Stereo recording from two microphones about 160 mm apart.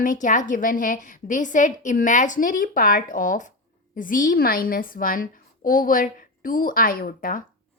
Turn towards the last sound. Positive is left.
turn(degrees=60)  # may be behind; listen again after turning